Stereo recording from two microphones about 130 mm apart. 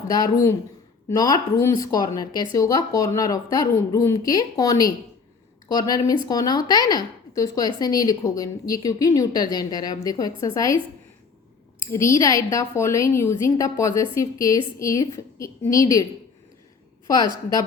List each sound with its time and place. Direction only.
1.1 s a woman's voice: 30° left (ahead or behind)
11.8 s a woman's voice: 20° left (ahead or behind)